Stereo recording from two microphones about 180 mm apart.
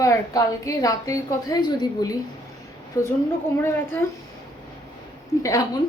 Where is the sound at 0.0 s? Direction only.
15° left (ahead or behind).